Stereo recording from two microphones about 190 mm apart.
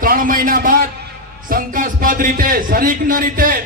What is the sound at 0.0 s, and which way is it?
A man's voice, 45° right (ahead or behind).